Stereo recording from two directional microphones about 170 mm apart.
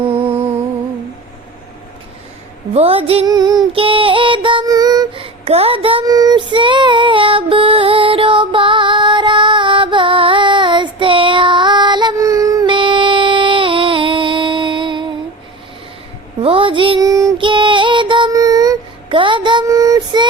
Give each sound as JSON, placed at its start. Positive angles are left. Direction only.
{"t": 0.0, "sound": "music", "side_deg": -30}
{"t": 2.7, "sound": "music", "side_deg": -35}
{"t": 3.2, "sound": "music", "side_deg": -25}
{"t": 3.7, "sound": "female singing", "side_deg": -30}
{"t": 16.4, "sound": "female singing", "side_deg": -30}